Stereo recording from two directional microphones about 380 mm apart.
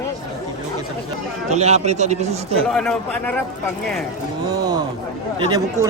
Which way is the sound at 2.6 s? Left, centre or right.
Centre.